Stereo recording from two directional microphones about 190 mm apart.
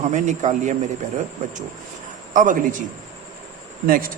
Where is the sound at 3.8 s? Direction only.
50° right (ahead or behind).